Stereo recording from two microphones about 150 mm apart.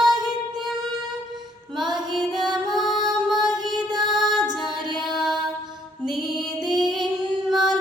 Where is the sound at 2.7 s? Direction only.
Centre (ahead or behind).